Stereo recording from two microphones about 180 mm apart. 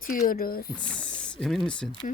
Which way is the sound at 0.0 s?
50° left (ahead or behind).